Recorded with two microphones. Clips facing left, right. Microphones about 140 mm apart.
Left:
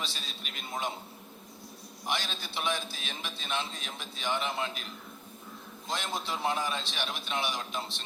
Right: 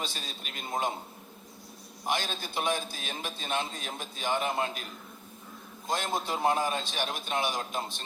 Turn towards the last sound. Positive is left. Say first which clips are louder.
# right 3 dB
turn(degrees=-45)  # may be behind; listen again after turning